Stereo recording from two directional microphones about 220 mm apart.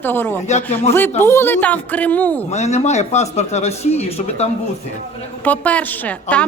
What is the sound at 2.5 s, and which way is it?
Speech, 30° left (ahead or behind).